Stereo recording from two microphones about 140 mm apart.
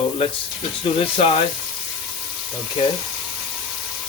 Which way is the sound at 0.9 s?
40° left (ahead or behind).